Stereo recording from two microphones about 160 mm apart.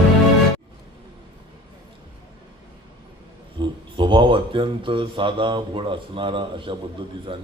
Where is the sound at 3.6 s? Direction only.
30° right (ahead or behind).